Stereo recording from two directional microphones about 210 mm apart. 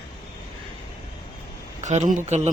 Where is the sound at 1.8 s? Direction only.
35° right (ahead or behind).